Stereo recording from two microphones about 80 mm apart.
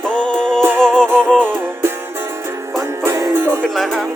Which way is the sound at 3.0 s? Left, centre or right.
Right.